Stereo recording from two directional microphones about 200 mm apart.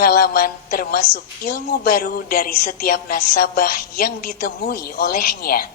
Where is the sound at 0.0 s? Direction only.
50° left (ahead or behind).